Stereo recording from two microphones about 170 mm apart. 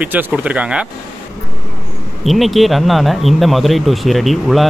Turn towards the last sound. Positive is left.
turn(degrees=0)  # may be behind; listen again after turning